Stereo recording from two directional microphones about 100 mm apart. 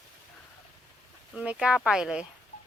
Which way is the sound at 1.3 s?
10° right (ahead or behind).